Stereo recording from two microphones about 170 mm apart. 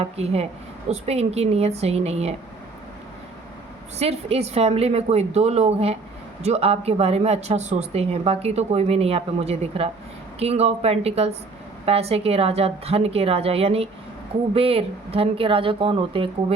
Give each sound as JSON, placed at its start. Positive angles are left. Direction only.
{"t": 0.0, "sound": "speech", "side_deg": -35}
{"t": 3.9, "sound": "speech", "side_deg": -40}